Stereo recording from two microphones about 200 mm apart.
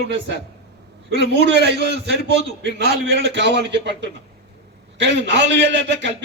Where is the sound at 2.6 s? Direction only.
60° right (ahead or behind).